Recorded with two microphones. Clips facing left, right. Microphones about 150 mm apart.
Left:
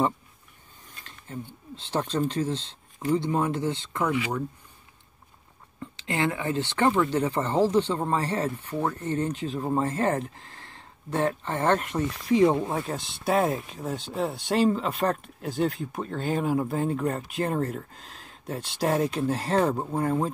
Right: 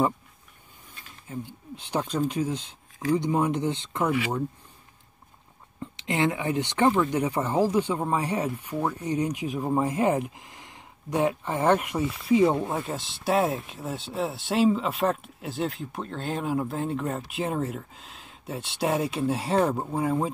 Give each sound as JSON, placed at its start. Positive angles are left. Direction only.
{"t": 1.0, "sound": "speech", "side_deg": -10}
{"t": 5.8, "sound": "speech", "side_deg": -20}